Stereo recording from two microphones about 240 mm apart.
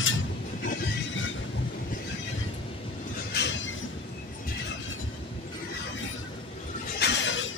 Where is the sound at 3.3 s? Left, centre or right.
Left.